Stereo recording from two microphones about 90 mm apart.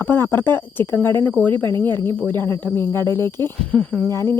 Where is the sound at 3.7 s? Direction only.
10° left (ahead or behind).